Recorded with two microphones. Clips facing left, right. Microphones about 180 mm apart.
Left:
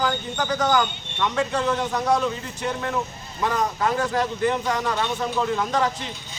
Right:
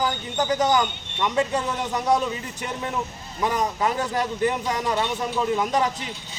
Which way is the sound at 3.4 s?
15° right (ahead or behind).